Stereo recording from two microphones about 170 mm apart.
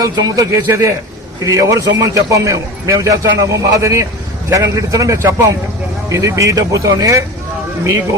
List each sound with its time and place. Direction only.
0.0 s a man's voice: 20° right (ahead or behind)